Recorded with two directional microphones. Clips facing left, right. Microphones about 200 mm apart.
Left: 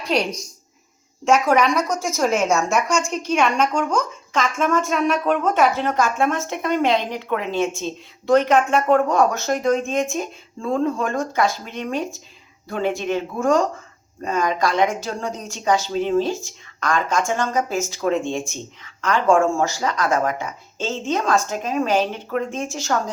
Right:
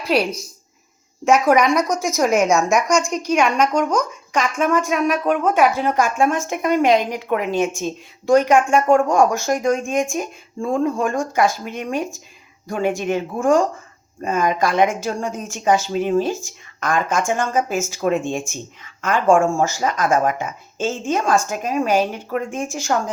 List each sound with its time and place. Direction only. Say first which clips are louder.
0.0 s a woman's voice: right 3 dB; 5° right (ahead or behind)